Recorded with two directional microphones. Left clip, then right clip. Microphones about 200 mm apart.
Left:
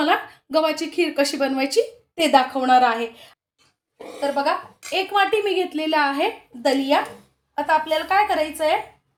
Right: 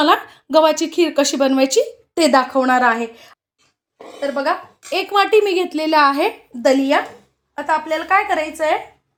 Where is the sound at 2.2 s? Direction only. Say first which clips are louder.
Right 3 dB; 35° right (ahead or behind).